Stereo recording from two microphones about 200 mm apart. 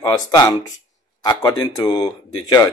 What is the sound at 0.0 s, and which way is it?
A man's voice, 20° left (ahead or behind).